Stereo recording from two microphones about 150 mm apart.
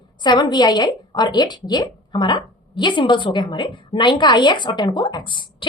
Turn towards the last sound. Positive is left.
turn(degrees=35)  # may be behind; listen again after turning